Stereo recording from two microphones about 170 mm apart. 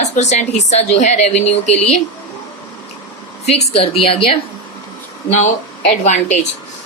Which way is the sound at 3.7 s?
35° left (ahead or behind).